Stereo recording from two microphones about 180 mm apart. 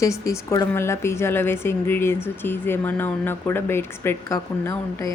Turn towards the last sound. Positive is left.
turn(degrees=15)  # may be behind; listen again after turning